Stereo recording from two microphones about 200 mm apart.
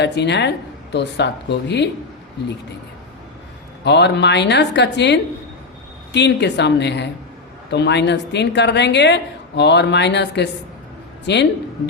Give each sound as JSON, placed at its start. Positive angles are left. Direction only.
{"t": 0.0, "sound": "speech", "side_deg": 60}
{"t": 3.8, "sound": "speech", "side_deg": 60}